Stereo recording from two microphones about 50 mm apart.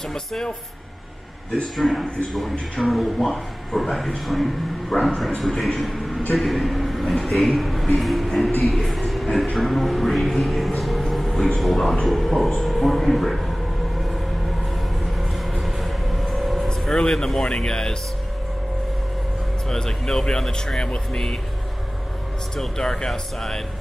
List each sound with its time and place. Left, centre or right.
0.1 s speech: centre
1.8 s a man's voice: centre
8.5 s speech: centre
8.8 s speech: centre
15.1 s train: centre
16.6 s speech: centre
19.7 s speech: centre
22.6 s speech: centre